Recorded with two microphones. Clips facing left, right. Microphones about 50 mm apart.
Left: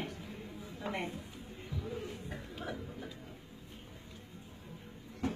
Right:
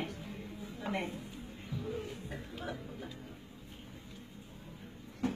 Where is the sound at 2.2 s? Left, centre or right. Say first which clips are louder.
Right 1 dB; centre.